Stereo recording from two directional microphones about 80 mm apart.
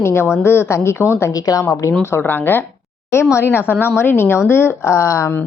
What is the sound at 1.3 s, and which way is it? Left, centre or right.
Speech, left.